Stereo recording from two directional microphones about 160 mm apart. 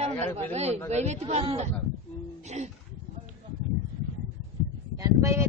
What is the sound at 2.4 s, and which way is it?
Music, 45° right (ahead or behind).